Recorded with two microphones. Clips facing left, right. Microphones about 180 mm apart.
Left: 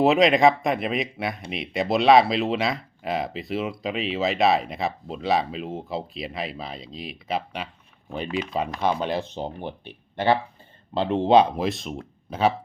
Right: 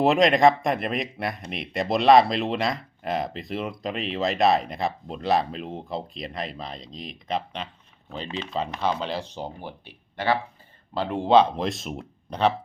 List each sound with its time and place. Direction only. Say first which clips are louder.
0.0 s speech: left 1 dB; centre (ahead or behind); by 9.7 s 20° left (ahead or behind)
10.9 s speech: left 1 dB; 20° left (ahead or behind); by 12.5 s 5° left (ahead or behind)